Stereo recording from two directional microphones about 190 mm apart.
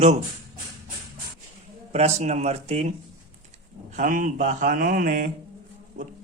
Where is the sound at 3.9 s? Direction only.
45° right (ahead or behind).